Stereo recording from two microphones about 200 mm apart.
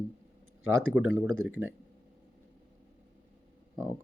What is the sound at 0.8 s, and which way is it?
Speech, 5° right (ahead or behind).